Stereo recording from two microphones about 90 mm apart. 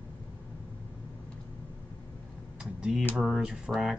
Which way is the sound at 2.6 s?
10° right (ahead or behind).